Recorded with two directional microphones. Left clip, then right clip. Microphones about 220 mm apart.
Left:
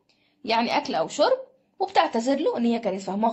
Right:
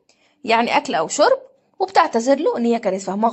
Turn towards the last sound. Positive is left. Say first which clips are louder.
# right 6 dB
turn(degrees=-25)  # may be behind; listen again after turning